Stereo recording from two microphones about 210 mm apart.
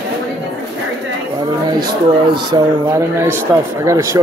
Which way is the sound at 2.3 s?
20° right (ahead or behind).